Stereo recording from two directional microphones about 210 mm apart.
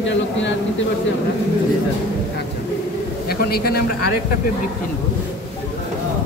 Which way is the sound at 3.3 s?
45° left (ahead or behind).